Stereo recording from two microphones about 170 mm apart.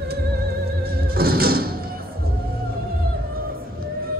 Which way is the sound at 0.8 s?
65° right (ahead or behind).